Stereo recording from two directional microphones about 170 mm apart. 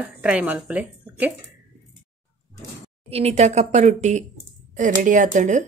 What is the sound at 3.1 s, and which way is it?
A woman's voice, 35° right (ahead or behind).